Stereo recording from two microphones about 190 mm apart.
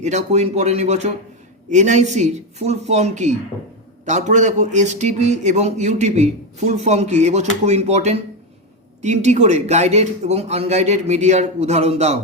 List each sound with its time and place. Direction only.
0.0 s a man's voice: 35° right (ahead or behind)